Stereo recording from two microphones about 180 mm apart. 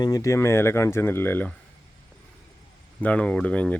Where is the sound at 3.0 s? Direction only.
5° left (ahead or behind).